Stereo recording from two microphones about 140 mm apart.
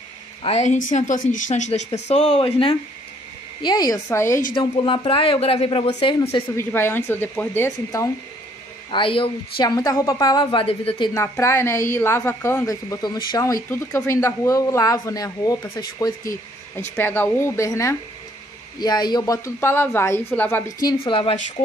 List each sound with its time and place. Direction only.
0.4 s speech: 50° left (ahead or behind)
2.3 s speech: 40° left (ahead or behind)
3.6 s speech: 30° left (ahead or behind)
4.6 s speech: 40° left (ahead or behind)
6.5 s a woman's voice: 15° left (ahead or behind)
8.9 s speech: 40° left (ahead or behind)
11.1 s a woman's voice: 20° left (ahead or behind)
12.6 s speech: 25° left (ahead or behind)
16.9 s a woman's voice: 15° left (ahead or behind)
21.0 s speech: 40° left (ahead or behind)